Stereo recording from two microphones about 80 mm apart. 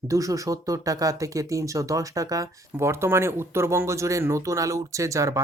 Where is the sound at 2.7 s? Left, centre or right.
Right.